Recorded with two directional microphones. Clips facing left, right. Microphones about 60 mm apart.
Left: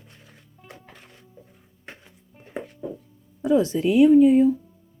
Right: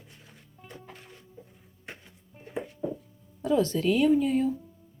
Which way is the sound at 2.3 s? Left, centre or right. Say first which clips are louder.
Right 2 dB; centre.